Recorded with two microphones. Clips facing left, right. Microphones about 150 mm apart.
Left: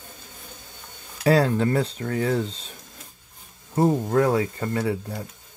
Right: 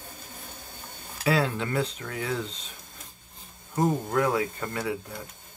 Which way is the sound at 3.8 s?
30° left (ahead or behind).